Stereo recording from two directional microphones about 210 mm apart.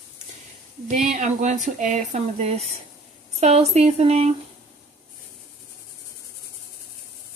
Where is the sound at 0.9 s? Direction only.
35° right (ahead or behind).